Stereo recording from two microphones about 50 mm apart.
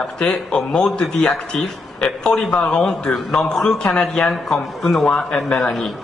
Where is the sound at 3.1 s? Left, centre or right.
Centre.